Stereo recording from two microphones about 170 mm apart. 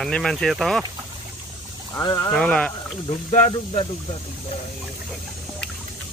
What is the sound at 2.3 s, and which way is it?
Speech, 5° left (ahead or behind).